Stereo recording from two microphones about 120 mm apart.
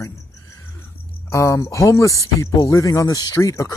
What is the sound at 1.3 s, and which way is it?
Speech, 25° left (ahead or behind).